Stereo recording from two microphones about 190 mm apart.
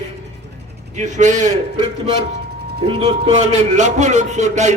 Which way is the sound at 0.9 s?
40° right (ahead or behind).